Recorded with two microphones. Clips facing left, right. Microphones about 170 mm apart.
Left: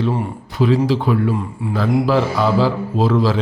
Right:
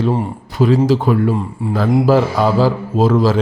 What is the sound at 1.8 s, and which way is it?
A man's voice, 45° right (ahead or behind).